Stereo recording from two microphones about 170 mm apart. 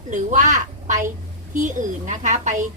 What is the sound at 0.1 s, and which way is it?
A child's voice, 45° right (ahead or behind).